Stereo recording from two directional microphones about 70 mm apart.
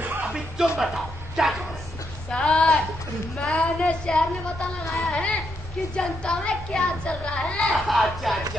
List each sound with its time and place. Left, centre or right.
0.2 s music: centre
0.7 s a man's voice: centre
2.3 s speech: centre
7.6 s speech: centre